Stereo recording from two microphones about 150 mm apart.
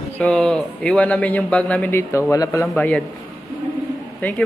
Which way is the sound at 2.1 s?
20° left (ahead or behind).